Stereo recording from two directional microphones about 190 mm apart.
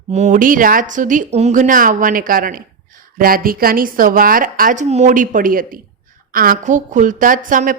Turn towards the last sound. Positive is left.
turn(degrees=-45)  # may be behind; listen again after turning